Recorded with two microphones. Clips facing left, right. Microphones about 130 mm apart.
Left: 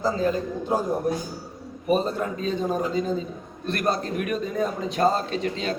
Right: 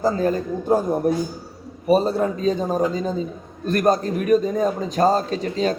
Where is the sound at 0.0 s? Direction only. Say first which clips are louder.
Right 4 dB; 45° right (ahead or behind).